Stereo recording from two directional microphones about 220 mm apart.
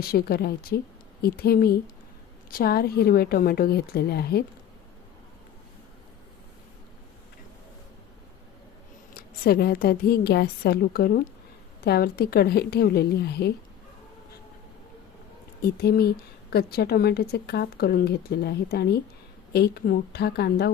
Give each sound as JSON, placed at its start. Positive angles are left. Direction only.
{"t": 0.0, "sound": "speech", "side_deg": 45}
{"t": 9.4, "sound": "speech", "side_deg": 45}
{"t": 15.6, "sound": "speech", "side_deg": 45}